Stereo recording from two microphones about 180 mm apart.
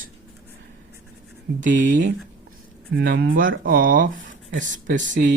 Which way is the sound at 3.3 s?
50° right (ahead or behind).